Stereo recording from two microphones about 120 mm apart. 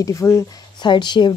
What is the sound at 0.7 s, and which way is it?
Speech, 40° left (ahead or behind).